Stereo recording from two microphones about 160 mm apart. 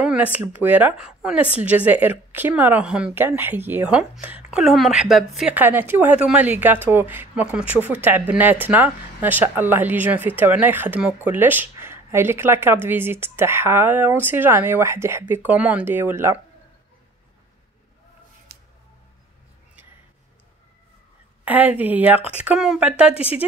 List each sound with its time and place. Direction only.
0.0 s speech: 5° right (ahead or behind)
18.5 s a sound: 80° right
21.5 s speech: 10° right (ahead or behind)